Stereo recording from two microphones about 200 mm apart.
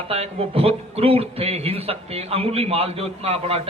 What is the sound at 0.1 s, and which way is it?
A man's voice, 30° right (ahead or behind).